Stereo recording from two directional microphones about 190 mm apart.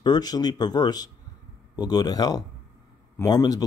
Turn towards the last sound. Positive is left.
turn(degrees=20)  # may be behind; listen again after turning